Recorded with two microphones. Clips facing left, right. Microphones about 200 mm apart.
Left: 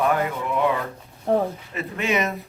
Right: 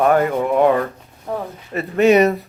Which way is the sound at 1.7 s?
40° right (ahead or behind).